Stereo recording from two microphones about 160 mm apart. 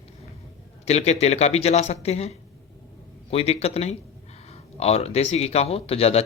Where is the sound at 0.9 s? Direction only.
45° left (ahead or behind).